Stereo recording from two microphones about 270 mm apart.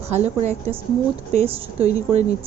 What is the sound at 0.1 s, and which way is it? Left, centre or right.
A woman's voice, right.